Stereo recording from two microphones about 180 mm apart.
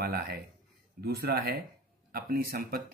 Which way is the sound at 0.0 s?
60° right (ahead or behind).